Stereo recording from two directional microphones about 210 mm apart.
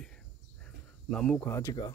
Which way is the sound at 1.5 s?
15° left (ahead or behind).